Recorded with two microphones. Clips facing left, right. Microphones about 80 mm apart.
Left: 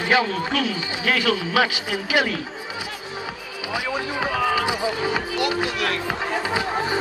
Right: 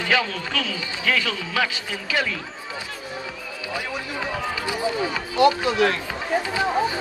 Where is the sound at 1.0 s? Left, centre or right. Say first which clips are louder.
Left 3 dB; left.